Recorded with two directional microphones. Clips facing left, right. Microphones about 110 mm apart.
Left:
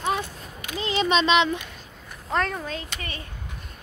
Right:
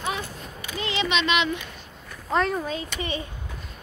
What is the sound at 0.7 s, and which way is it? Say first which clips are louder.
Speech: left 3 dB; 35° left (ahead or behind).